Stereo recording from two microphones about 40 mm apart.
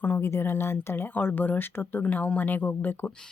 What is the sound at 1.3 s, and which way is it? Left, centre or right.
Speech, left.